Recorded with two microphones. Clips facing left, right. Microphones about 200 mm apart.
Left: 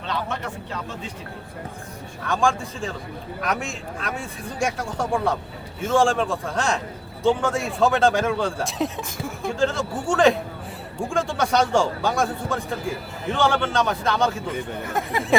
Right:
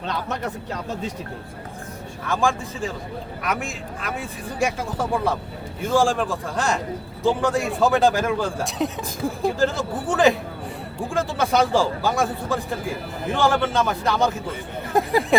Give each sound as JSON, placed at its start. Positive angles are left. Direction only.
{"t": 0.1, "sound": "speech", "side_deg": -40}
{"t": 2.2, "sound": "a man's voice", "side_deg": 0}
{"t": 15.3, "sound": "a sound", "side_deg": 0}